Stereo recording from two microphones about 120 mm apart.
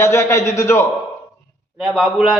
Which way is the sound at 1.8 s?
5° right (ahead or behind).